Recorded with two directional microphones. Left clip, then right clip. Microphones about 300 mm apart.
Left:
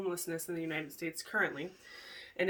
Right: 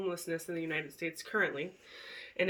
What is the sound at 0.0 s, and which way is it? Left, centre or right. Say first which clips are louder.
Speech: right 1 dB; centre.